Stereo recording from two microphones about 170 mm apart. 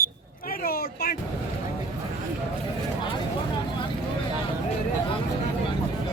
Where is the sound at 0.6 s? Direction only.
60° left (ahead or behind).